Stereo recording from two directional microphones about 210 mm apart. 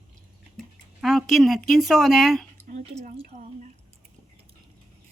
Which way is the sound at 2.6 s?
35° right (ahead or behind).